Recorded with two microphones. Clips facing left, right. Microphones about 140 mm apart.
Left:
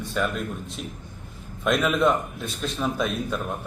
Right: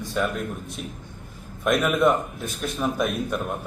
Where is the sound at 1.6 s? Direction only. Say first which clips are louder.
Right 1 dB; 10° right (ahead or behind).